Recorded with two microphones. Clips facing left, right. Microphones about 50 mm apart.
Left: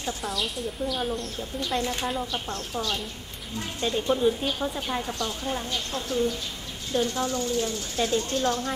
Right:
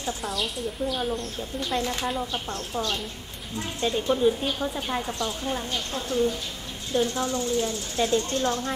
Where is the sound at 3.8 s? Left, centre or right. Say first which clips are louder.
Right 1 dB; centre.